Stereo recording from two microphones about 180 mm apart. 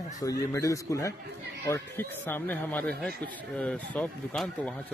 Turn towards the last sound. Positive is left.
turn(degrees=5)  # may be behind; listen again after turning